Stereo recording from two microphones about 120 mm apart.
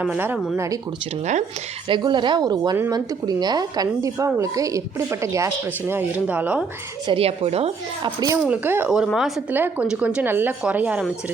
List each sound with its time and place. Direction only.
0.0 s speech: 15° right (ahead or behind)
0.5 s a woman's voice: 25° right (ahead or behind)
1.9 s a woman's voice: 40° right (ahead or behind); by 6.7 s 10° right (ahead or behind)
7.1 s speech: 55° right (ahead or behind)
8.0 s a woman's voice: 30° right (ahead or behind)
8.4 s speech: 15° right (ahead or behind)
9.1 s a woman's voice: centre (ahead or behind)
9.5 s speech: 15° right (ahead or behind)